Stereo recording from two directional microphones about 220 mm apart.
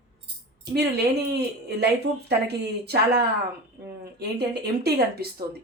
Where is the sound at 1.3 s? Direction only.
50° right (ahead or behind).